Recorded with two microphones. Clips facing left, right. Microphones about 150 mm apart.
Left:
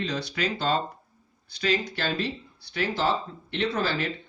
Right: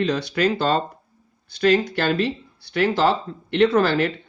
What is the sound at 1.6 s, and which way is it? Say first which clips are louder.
Speech: right 9 dB; 55° right (ahead or behind).